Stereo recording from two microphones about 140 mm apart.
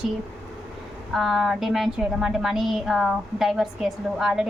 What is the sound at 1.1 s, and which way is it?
Speech, centre (ahead or behind).